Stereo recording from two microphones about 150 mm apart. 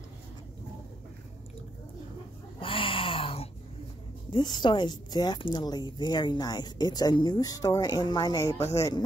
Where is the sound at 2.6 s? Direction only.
35° left (ahead or behind).